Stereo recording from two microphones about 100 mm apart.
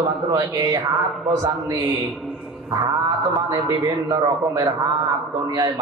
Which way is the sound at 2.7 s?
45° right (ahead or behind).